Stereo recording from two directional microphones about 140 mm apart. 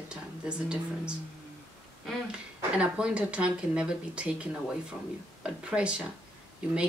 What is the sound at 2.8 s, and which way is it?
Speech, 5° right (ahead or behind).